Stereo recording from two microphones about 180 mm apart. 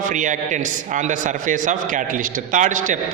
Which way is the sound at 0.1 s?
45° right (ahead or behind).